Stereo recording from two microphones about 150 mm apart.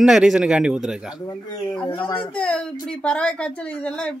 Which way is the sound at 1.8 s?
35° left (ahead or behind).